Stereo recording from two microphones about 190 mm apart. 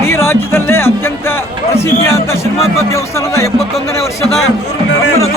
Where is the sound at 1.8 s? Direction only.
15° left (ahead or behind).